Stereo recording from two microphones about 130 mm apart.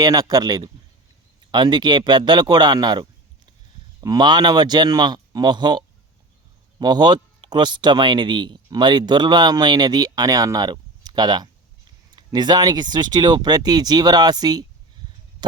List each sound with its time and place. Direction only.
0.0 s speech: 30° right (ahead or behind)